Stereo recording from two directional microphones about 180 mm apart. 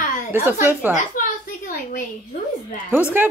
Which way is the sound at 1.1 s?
50° left (ahead or behind).